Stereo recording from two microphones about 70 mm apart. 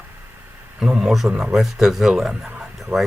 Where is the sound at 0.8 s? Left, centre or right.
Centre.